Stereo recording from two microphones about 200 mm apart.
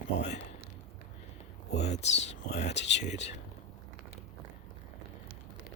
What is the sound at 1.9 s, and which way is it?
Speech, 35° left (ahead or behind).